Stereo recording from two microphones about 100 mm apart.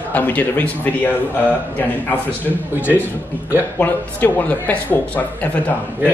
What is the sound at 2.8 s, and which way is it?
A man's voice, 20° left (ahead or behind).